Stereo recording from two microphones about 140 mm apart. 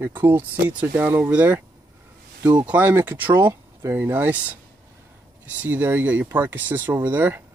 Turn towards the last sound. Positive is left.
turn(degrees=-15)  # may be behind; listen again after turning